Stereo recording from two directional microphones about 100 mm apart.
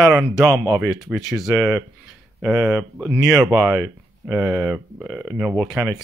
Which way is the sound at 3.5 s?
Centre (ahead or behind).